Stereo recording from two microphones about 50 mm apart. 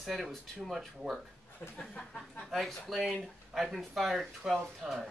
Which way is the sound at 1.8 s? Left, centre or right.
Centre.